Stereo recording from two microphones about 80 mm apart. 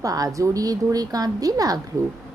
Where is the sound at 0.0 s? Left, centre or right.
Right.